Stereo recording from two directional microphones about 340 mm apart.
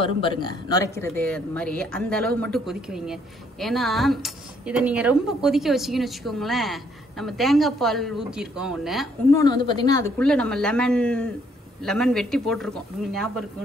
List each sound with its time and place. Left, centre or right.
0.0 s speech: centre
9.7 s speech: centre